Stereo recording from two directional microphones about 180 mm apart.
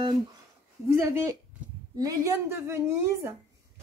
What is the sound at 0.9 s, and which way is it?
A woman's voice, 15° right (ahead or behind).